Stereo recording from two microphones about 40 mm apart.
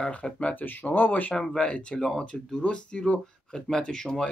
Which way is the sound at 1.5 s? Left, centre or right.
Left.